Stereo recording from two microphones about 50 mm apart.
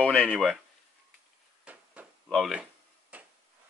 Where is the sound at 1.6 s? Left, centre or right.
Right.